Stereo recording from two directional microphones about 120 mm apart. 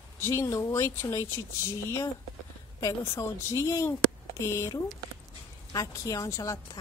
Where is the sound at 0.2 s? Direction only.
20° left (ahead or behind).